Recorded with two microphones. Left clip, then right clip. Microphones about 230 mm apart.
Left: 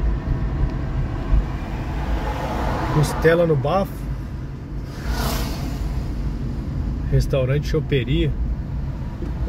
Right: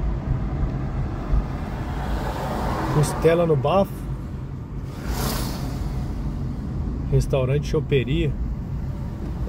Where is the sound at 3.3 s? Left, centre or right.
Centre.